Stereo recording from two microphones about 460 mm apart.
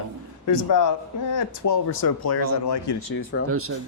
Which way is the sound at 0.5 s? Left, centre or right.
Left.